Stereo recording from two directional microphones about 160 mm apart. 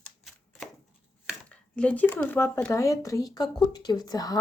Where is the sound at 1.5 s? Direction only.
5° left (ahead or behind).